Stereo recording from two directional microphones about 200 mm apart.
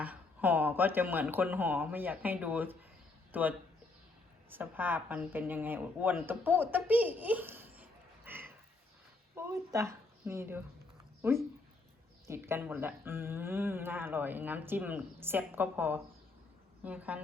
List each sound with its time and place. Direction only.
0.0 s speech: 10° right (ahead or behind)